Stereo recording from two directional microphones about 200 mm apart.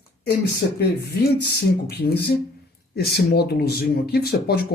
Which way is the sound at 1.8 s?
55° left (ahead or behind).